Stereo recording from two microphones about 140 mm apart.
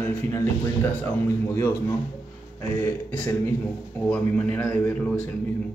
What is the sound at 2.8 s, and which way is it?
Speech, 15° left (ahead or behind).